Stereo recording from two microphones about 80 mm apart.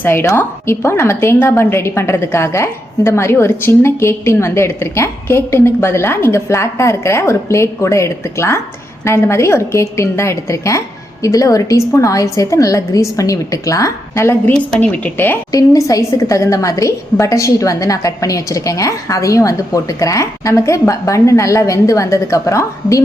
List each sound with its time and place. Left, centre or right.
0.0 s a woman's voice: left
14.8 s speech: left
15.5 s a woman's voice: left